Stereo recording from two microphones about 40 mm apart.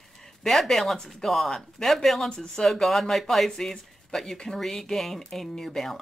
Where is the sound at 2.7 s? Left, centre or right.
Centre.